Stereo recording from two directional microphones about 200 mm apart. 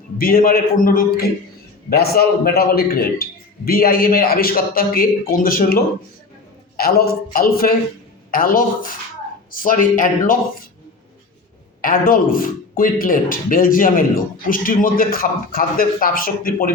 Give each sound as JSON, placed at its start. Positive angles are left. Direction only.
{"t": 0.2, "sound": "speech", "side_deg": 45}
{"t": 11.8, "sound": "speech", "side_deg": 45}